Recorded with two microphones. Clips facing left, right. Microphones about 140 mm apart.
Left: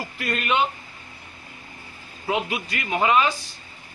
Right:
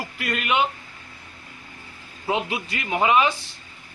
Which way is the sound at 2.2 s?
25° right (ahead or behind).